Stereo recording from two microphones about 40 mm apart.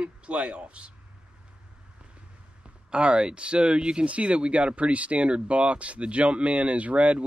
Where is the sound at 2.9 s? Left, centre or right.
Right.